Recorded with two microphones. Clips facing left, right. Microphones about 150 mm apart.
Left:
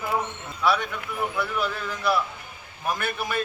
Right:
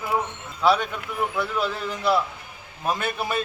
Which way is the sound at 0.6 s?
25° right (ahead or behind).